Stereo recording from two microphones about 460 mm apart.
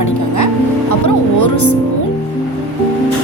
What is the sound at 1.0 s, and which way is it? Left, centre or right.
Speech, left.